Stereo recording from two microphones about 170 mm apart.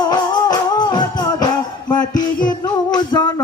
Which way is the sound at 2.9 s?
25° left (ahead or behind).